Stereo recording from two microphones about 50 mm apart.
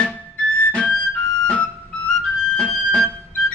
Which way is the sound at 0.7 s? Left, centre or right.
Centre.